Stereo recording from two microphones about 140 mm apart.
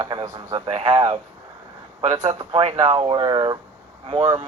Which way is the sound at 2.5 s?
50° right (ahead or behind).